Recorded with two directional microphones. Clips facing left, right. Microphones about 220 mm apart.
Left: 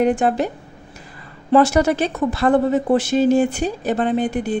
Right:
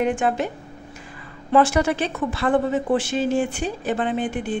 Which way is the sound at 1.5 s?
40° left (ahead or behind).